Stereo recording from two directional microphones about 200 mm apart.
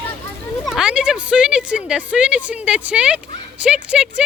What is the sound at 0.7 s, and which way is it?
A woman's voice, 5° right (ahead or behind).